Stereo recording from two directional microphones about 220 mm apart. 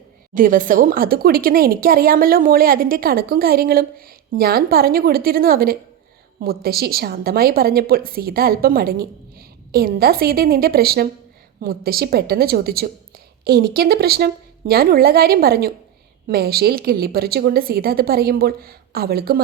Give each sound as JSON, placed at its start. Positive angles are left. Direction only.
{"t": 0.3, "sound": "a woman's voice", "side_deg": -35}